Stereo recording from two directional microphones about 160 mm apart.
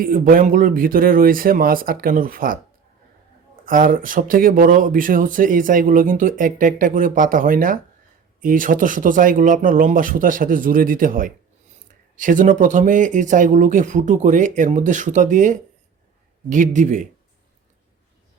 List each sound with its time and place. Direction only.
0.0 s speech: 60° right (ahead or behind)